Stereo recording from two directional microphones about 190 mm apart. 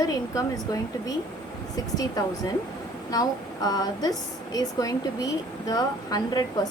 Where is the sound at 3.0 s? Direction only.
20° left (ahead or behind).